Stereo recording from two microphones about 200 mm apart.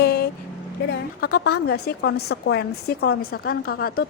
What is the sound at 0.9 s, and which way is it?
A woman's voice, 55° left (ahead or behind).